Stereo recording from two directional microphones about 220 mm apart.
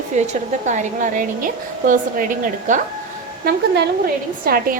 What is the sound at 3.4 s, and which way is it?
A woman's voice, 50° right (ahead or behind).